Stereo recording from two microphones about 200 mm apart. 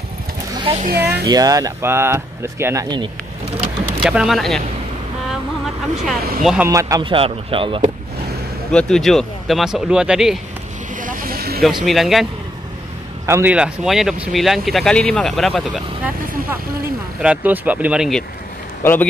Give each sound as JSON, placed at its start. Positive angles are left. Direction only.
{"t": 0.6, "sound": "a sound", "side_deg": -30}
{"t": 0.8, "sound": "speech", "side_deg": -55}
{"t": 1.2, "sound": "speech", "side_deg": -20}
{"t": 4.0, "sound": "speech", "side_deg": 0}
{"t": 6.4, "sound": "speech", "side_deg": -5}
{"t": 6.7, "sound": "speech", "side_deg": -15}
{"t": 8.7, "sound": "speech", "side_deg": 5}
{"t": 11.0, "sound": "vehicle", "side_deg": -45}
{"t": 11.8, "sound": "speech", "side_deg": 0}
{"t": 13.3, "sound": "speech", "side_deg": -10}
{"t": 18.8, "sound": "a man's voice", "side_deg": 10}